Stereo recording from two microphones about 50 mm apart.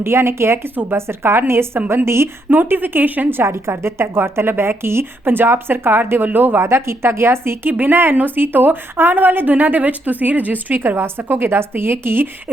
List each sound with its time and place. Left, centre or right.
0.0 s speech: right
2.5 s a woman's voice: right
3.4 s a woman's voice: right
6.6 s speech: right
7.7 s a woman's voice: right
10.8 s a woman's voice: right